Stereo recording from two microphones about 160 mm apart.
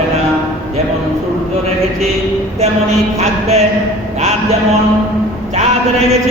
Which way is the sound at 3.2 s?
40° right (ahead or behind).